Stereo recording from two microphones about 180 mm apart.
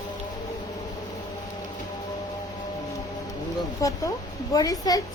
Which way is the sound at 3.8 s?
20° left (ahead or behind).